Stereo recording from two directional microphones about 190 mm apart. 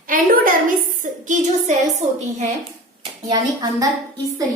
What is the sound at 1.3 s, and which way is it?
A woman's voice, 40° right (ahead or behind).